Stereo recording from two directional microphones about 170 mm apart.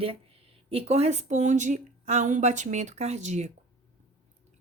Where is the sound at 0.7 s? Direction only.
35° right (ahead or behind).